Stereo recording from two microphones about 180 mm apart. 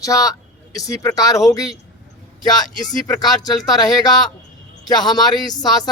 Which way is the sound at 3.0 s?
20° left (ahead or behind).